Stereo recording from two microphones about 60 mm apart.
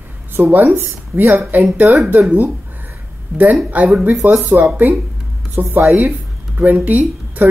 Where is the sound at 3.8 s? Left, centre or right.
Right.